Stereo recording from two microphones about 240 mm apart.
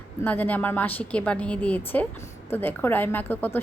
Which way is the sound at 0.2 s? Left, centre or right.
Centre.